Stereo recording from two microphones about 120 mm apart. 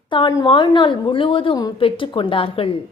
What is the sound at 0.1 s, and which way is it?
A woman's voice, 40° left (ahead or behind).